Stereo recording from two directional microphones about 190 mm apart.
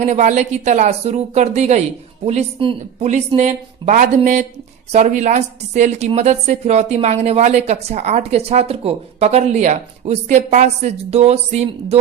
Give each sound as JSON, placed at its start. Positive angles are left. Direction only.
{"t": 0.0, "sound": "a woman's voice", "side_deg": -35}